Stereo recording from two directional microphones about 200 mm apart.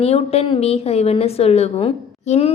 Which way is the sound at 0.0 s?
30° left (ahead or behind).